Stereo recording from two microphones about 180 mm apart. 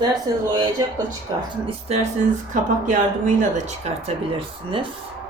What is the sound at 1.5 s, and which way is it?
Speech, 35° right (ahead or behind).